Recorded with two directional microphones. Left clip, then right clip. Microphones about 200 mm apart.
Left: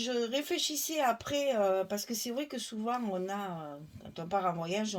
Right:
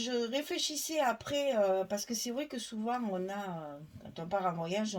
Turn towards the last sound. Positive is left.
turn(degrees=35)  # may be behind; listen again after turning